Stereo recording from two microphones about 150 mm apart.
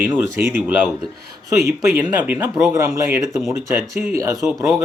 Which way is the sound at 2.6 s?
20° right (ahead or behind).